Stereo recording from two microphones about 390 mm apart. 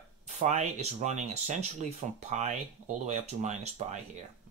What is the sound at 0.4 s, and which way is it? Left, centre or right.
Speech, centre.